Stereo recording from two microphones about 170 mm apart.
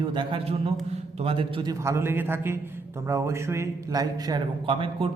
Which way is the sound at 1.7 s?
15° right (ahead or behind).